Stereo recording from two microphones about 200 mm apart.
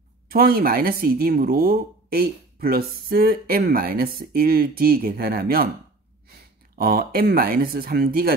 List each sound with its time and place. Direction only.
0.3 s speech: 50° right (ahead or behind)
6.8 s speech: 45° right (ahead or behind)